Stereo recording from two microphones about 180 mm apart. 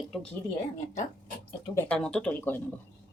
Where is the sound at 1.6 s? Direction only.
15° left (ahead or behind).